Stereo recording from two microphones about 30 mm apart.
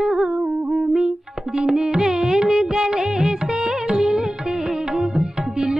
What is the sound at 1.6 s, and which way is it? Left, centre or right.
Music, right.